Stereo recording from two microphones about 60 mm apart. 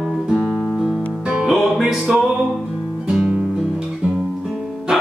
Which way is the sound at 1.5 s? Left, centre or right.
Centre.